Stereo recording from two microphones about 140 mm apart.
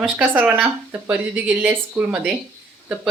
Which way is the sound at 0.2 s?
10° right (ahead or behind).